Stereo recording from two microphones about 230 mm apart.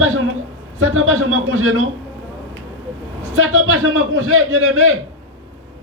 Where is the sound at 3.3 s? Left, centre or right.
Right.